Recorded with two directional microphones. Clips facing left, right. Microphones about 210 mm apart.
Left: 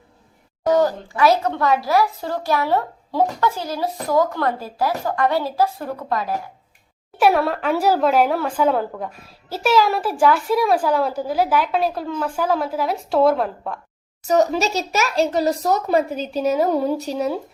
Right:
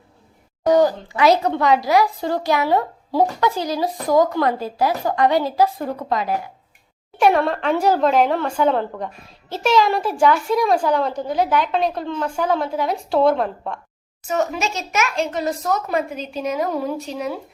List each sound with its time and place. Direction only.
0.6 s a woman's voice: 15° right (ahead or behind)
7.2 s a woman's voice: 5° left (ahead or behind)
14.3 s a child's voice: 35° left (ahead or behind)